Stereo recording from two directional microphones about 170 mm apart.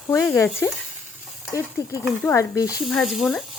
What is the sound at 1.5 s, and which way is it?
Speech, 20° left (ahead or behind).